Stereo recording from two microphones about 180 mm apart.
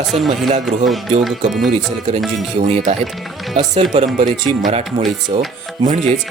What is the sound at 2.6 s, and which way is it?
Speech, 40° right (ahead or behind).